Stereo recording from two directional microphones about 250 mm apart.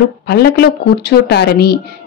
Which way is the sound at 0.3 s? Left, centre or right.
Left.